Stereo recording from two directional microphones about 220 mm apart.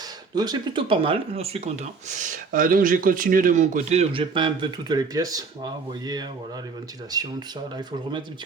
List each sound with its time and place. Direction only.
0.3 s speech: 20° right (ahead or behind)